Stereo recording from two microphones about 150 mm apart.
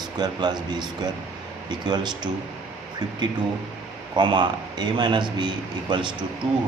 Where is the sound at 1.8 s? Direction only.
30° right (ahead or behind).